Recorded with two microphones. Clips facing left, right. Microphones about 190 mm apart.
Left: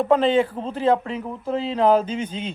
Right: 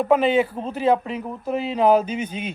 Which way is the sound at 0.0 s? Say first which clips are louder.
Even; 10° right (ahead or behind).